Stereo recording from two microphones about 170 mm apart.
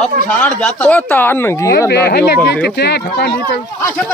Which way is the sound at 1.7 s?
70° left (ahead or behind).